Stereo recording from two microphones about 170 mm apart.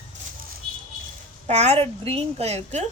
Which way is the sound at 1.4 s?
40° right (ahead or behind).